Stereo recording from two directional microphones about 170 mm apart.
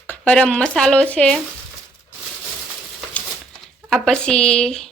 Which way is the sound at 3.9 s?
5° left (ahead or behind).